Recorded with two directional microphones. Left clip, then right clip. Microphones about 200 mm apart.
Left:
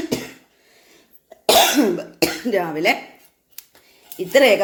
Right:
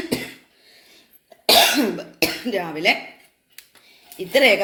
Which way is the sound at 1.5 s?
15° left (ahead or behind).